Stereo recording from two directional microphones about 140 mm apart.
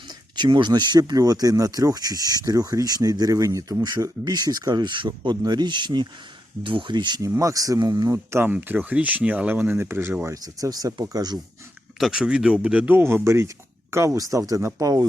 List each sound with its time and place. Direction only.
0.1 s speech: 30° right (ahead or behind)
11.9 s speech: 5° right (ahead or behind); by 15.0 s 25° right (ahead or behind)